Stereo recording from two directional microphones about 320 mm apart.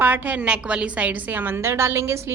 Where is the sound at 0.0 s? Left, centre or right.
Centre.